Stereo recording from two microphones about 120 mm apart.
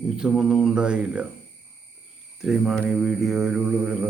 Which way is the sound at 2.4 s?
Centre (ahead or behind).